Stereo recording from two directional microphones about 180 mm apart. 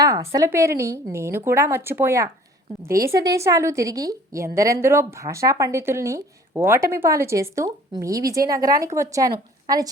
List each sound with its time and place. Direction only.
0.0 s a woman's voice: 15° right (ahead or behind)